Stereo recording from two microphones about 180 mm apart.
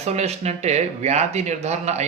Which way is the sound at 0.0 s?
35° right (ahead or behind).